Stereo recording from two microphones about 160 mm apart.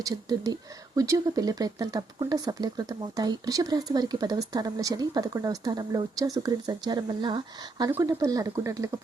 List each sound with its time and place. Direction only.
0.0 s speech: 25° right (ahead or behind)
7.9 s speech: 15° right (ahead or behind)